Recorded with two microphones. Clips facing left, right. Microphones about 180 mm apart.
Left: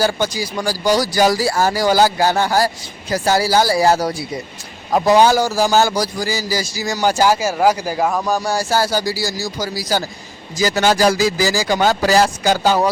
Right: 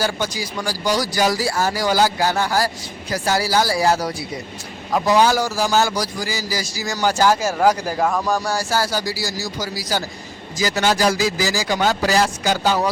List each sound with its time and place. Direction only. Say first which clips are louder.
0.0 s speech: left 4 dB; 30° left (ahead or behind)
6.7 s speech: left 2 dB; 20° left (ahead or behind)
8.4 s speech: left 3 dB; 25° left (ahead or behind)